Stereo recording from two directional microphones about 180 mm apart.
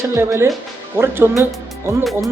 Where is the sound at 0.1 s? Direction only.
15° right (ahead or behind).